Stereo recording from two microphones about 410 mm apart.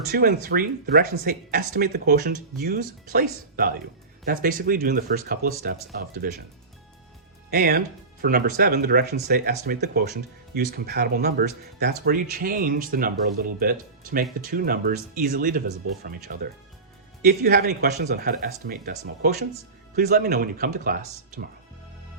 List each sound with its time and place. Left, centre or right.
0.1 s speech: right
7.5 s speech: right